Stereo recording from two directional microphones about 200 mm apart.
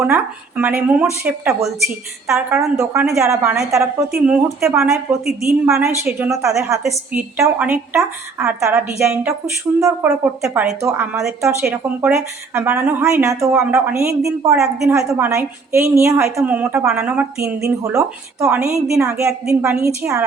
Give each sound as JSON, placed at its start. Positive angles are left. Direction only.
{"t": 0.0, "sound": "a woman's voice", "side_deg": -10}
{"t": 14.6, "sound": "a woman's voice", "side_deg": 0}
{"t": 14.9, "sound": "a woman's voice", "side_deg": -15}